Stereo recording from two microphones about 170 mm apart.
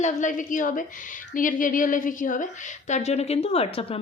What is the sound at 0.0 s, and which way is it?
A woman's voice, 45° left (ahead or behind).